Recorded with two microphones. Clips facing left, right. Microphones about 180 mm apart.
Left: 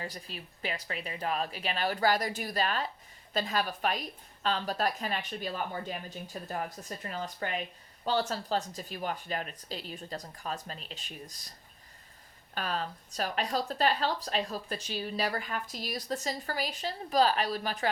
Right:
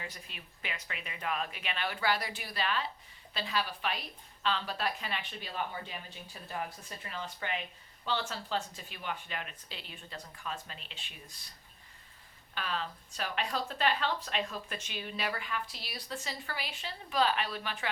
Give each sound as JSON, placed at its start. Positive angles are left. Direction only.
{"t": 0.0, "sound": "a woman's voice", "side_deg": 35}
{"t": 12.5, "sound": "speech", "side_deg": 40}